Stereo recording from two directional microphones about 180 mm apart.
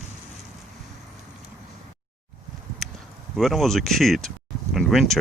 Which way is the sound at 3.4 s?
Centre (ahead or behind).